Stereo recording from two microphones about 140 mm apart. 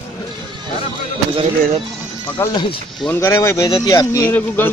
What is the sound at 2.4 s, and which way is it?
Speech, 15° left (ahead or behind).